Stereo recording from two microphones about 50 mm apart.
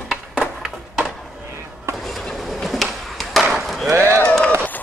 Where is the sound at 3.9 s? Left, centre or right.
Right.